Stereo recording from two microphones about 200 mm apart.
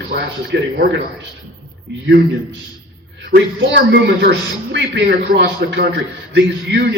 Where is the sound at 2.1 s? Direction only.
65° right (ahead or behind).